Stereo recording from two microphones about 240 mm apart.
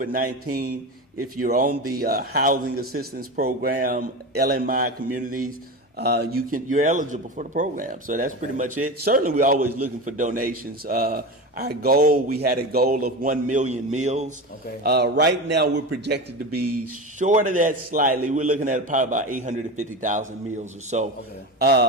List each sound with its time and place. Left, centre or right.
0.0 s a man's voice: right
1.4 s a man's voice: right
1.7 s a man's voice: right
2.0 s a man's voice: right
9.6 s a man's voice: right
10.1 s a man's voice: right
14.8 s a man's voice: right
17.2 s a man's voice: right
21.6 s a man's voice: right